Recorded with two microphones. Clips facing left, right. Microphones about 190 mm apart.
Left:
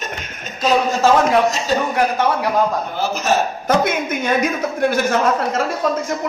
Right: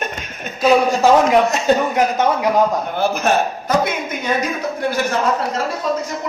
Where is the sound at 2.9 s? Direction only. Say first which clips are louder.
Right 4 dB; 55° right (ahead or behind).